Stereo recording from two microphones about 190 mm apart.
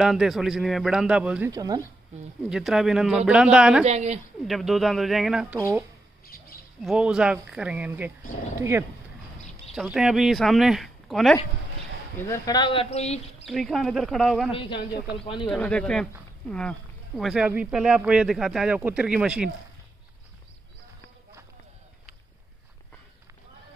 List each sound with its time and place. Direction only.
0.0 s speech: centre (ahead or behind)
1.5 s speech: 20° right (ahead or behind)
2.5 s speech: centre (ahead or behind)
3.8 s a woman's voice: 35° right (ahead or behind)
4.5 s speech: centre (ahead or behind)
5.6 s speech: 15° right (ahead or behind)
6.2 s bird: 50° left (ahead or behind)
6.8 s speech: centre (ahead or behind)
9.8 s speech: 5° right (ahead or behind)
12.2 s speech: 15° left (ahead or behind); by 13.5 s 35° left (ahead or behind)
13.5 s speech: centre (ahead or behind)
14.5 s speech: 25° left (ahead or behind)
15.4 s speech: 5° left (ahead or behind)